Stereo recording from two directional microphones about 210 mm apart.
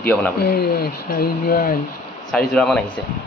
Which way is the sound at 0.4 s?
50° left (ahead or behind).